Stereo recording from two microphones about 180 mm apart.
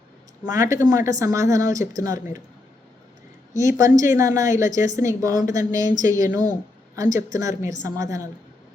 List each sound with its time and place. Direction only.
0.4 s speech: 20° right (ahead or behind)
3.6 s a woman's voice: 15° right (ahead or behind)